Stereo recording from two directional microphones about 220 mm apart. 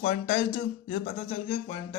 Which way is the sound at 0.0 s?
35° left (ahead or behind).